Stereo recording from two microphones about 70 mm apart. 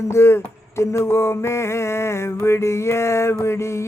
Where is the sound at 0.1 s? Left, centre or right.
Left.